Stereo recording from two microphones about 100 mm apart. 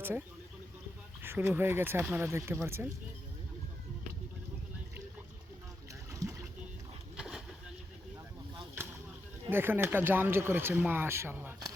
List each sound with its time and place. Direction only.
0.0 s speech: 20° right (ahead or behind)
6.1 s boat: 30° right (ahead or behind)
7.2 s a sound: 5° right (ahead or behind)
9.5 s speech: 20° right (ahead or behind)